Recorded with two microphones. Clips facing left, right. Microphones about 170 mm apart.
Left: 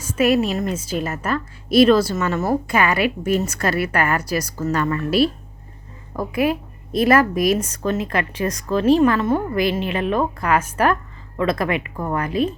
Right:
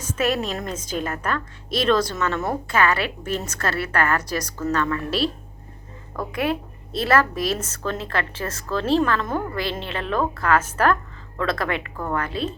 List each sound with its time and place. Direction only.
0.0 s a woman's voice: 10° left (ahead or behind)